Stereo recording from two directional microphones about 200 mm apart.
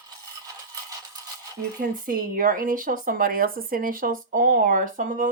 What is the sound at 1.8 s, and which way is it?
Speech, 45° right (ahead or behind).